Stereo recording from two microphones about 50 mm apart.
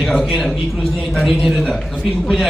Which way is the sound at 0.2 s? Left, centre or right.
Centre.